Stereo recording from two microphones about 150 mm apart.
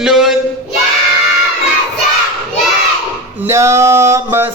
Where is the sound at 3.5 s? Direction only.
20° right (ahead or behind).